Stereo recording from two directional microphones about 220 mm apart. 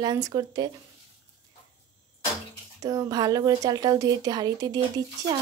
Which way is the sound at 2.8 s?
15° right (ahead or behind).